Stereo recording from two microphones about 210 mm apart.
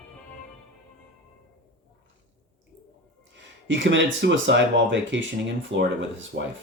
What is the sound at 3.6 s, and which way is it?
Speech, 60° right (ahead or behind).